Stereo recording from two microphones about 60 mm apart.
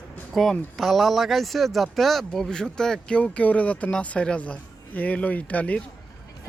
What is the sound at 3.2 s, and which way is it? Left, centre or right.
Speech, left.